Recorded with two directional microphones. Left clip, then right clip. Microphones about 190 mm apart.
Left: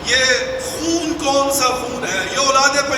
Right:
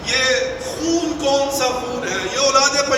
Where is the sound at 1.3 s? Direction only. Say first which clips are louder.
Left 2 dB; 25° left (ahead or behind).